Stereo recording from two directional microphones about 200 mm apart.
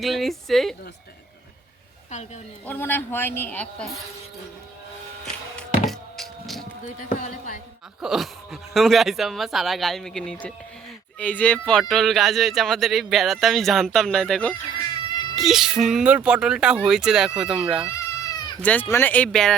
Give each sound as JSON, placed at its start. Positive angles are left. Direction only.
{"t": 0.0, "sound": "speech", "side_deg": 0}
{"t": 2.0, "sound": "speech", "side_deg": 35}
{"t": 2.6, "sound": "a man's voice", "side_deg": 10}
{"t": 5.2, "sound": "music", "side_deg": 0}
{"t": 6.8, "sound": "speech", "side_deg": 40}
{"t": 8.0, "sound": "speech", "side_deg": 0}
{"t": 17.8, "sound": "cat", "side_deg": 15}
{"t": 18.6, "sound": "a man's voice", "side_deg": 10}